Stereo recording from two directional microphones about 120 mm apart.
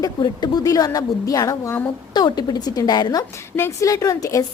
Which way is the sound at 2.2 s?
35° left (ahead or behind).